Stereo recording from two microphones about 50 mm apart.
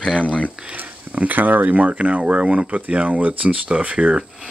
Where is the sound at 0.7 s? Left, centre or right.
Right.